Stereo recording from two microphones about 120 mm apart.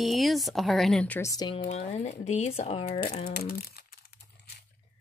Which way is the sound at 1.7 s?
60° left (ahead or behind).